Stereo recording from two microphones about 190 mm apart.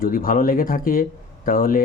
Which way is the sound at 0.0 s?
50° left (ahead or behind).